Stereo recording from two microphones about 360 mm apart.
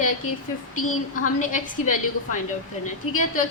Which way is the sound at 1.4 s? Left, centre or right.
Left.